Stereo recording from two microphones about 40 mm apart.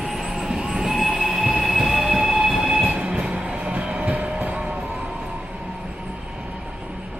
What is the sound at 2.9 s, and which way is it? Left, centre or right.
Train, right.